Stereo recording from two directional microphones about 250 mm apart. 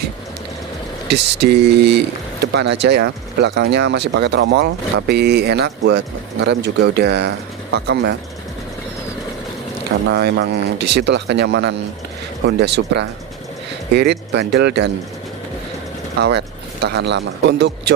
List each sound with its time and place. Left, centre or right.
1.0 s speech: right
10.1 s speech: right
16.8 s speech: right